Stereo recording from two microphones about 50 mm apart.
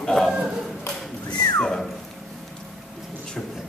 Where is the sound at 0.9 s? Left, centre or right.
Left.